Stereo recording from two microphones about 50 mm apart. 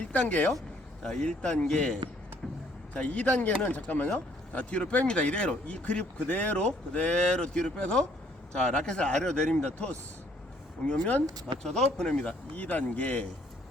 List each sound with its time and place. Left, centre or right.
0.1 s speech: left
1.0 s speech: centre
2.9 s speech: left
11.6 s speech: centre
12.5 s speech: left